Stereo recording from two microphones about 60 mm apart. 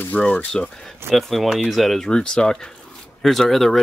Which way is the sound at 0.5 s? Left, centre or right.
Centre.